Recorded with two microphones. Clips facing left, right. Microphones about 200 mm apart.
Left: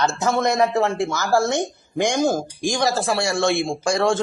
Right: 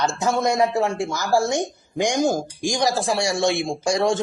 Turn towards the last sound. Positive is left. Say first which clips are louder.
# left 1 dB
turn(degrees=-15)  # may be behind; listen again after turning